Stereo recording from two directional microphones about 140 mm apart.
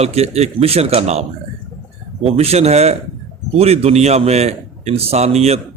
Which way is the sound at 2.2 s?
50° right (ahead or behind).